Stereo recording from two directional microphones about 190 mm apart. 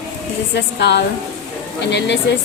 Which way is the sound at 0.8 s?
60° left (ahead or behind).